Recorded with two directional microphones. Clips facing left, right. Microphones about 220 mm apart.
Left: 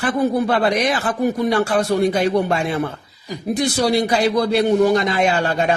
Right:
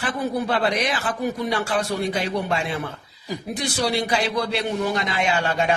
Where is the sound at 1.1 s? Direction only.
45° left (ahead or behind).